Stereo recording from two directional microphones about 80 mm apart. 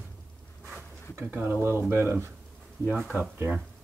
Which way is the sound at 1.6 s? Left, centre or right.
Right.